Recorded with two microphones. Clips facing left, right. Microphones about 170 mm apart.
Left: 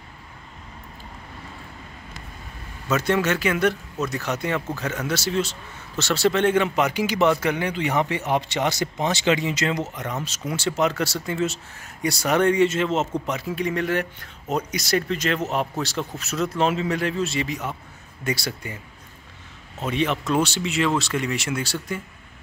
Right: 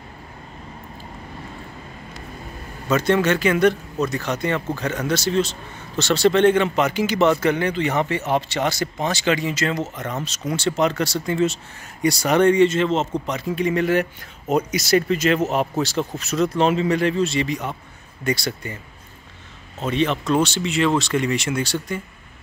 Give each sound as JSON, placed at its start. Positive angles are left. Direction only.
{"t": 2.9, "sound": "speech", "side_deg": 5}
{"t": 19.8, "sound": "speech", "side_deg": 10}